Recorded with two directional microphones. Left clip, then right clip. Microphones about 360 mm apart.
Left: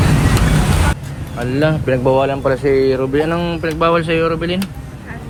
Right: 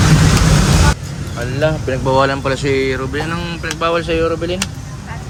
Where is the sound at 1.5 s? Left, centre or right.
Centre.